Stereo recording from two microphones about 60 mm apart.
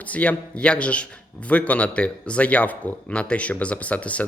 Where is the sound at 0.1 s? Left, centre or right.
Left.